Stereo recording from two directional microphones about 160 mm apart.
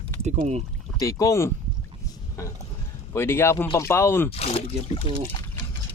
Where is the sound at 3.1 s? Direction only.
15° left (ahead or behind).